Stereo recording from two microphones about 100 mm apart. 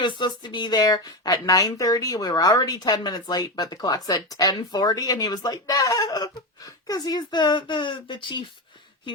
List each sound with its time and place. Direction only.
0.0 s a woman's voice: 50° left (ahead or behind)